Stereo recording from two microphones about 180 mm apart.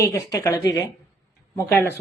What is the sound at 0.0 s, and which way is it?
A woman's voice, 20° left (ahead or behind).